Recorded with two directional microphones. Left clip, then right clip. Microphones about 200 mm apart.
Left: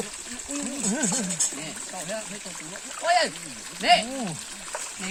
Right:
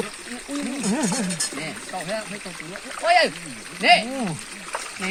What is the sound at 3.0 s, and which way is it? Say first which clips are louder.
Speech: right 4 dB; centre (ahead or behind).